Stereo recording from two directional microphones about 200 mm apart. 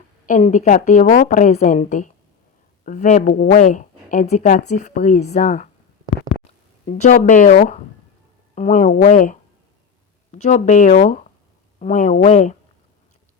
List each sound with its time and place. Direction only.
0.3 s speech: 40° left (ahead or behind)
6.8 s speech: 40° left (ahead or behind)